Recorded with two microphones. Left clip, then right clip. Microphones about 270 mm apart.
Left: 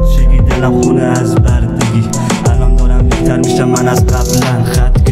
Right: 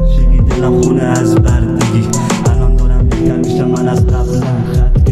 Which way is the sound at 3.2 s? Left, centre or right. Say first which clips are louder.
Left 2 dB; left.